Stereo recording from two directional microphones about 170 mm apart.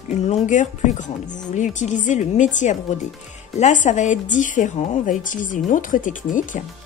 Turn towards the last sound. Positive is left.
turn(degrees=50)  # may be behind; listen again after turning